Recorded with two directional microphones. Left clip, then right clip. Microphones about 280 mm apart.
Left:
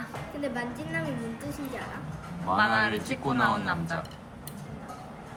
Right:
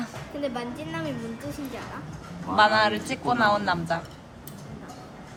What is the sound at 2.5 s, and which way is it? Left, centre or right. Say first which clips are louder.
A woman's voice: right 5 dB; centre.